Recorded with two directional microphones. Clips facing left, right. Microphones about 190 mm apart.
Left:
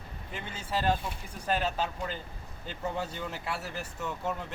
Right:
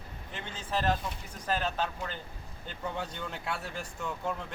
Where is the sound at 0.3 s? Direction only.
10° left (ahead or behind).